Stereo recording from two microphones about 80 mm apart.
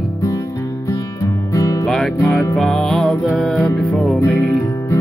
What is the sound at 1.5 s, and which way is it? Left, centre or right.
Music, left.